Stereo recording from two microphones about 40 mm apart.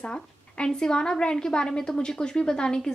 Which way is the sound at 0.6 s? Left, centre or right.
Centre.